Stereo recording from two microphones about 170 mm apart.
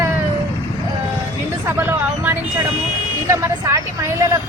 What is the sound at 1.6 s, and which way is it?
Speech, 10° right (ahead or behind).